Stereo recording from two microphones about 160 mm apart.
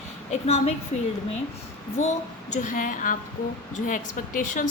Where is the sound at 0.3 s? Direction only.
45° left (ahead or behind).